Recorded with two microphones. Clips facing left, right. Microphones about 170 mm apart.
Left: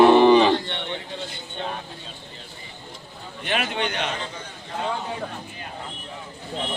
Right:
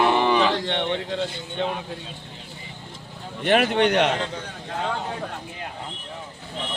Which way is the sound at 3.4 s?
50° right (ahead or behind).